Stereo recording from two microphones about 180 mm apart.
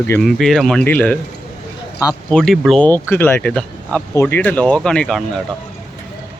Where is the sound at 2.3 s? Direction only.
5° left (ahead or behind).